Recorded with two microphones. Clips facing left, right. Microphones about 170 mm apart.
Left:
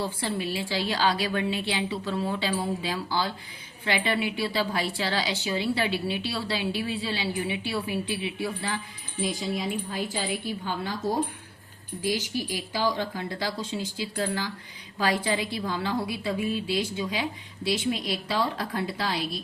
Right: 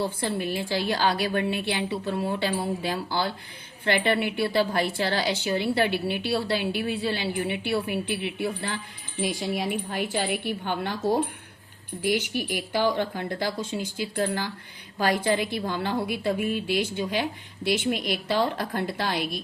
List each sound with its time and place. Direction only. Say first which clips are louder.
0.0 s a woman's voice: right 2 dB; 55° right (ahead or behind)